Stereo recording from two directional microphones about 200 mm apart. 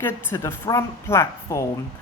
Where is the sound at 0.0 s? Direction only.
10° left (ahead or behind).